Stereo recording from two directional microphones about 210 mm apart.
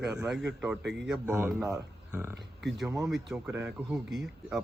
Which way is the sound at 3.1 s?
Centre (ahead or behind).